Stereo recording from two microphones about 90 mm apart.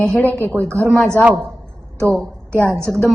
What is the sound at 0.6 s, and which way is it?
Speech, 30° right (ahead or behind).